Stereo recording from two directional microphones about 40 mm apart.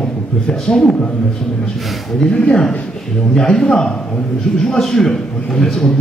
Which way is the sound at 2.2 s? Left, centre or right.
Left.